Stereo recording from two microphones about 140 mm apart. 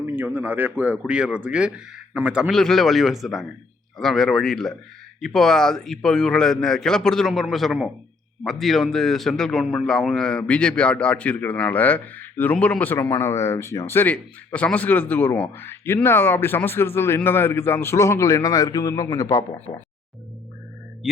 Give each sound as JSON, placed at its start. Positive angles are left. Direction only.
{"t": 0.0, "sound": "a man's voice", "side_deg": -15}